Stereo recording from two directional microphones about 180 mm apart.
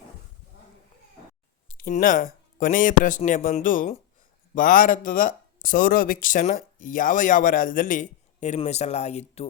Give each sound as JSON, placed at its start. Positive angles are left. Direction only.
{"t": 1.6, "sound": "speech", "side_deg": 50}